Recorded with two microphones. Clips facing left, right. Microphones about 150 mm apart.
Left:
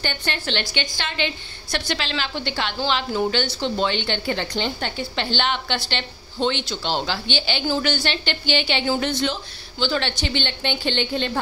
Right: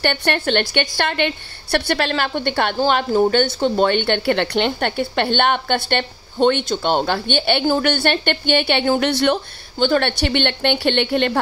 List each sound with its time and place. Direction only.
0.0 s a woman's voice: 60° right (ahead or behind)